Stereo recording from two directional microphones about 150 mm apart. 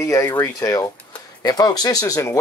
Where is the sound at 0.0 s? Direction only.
20° left (ahead or behind).